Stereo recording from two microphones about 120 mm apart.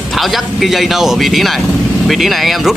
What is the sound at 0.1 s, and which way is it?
Speech, centre (ahead or behind).